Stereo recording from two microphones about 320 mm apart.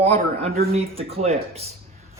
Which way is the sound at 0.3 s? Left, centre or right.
Centre.